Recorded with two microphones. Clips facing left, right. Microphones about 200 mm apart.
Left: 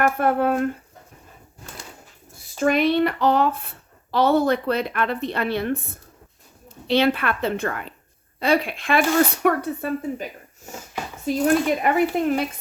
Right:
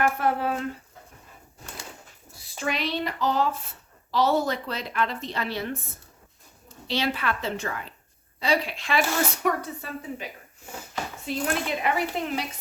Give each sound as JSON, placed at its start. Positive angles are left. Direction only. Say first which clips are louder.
{"t": 0.0, "sound": "speech", "louder": "left 5 dB", "side_deg": 55}
{"t": 2.3, "sound": "speech", "louder": "left 10 dB", "side_deg": 50}
{"t": 11.3, "sound": "speech", "louder": "left 9 dB", "side_deg": 45}